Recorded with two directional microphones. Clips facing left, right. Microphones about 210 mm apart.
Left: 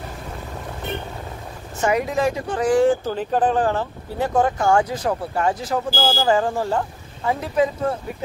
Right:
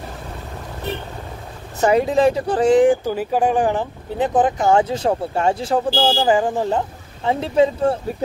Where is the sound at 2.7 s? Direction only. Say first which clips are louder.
Right 2 dB; 15° right (ahead or behind).